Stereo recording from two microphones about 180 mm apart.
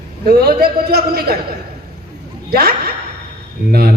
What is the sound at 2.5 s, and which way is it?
A man's voice, 60° right (ahead or behind).